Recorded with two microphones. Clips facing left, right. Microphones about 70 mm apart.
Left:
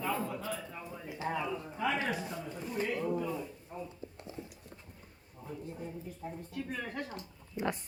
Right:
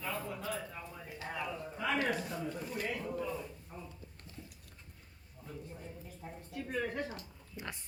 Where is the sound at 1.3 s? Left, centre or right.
Centre.